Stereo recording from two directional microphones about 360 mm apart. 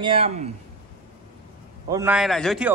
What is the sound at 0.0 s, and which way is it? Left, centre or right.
Speech, centre.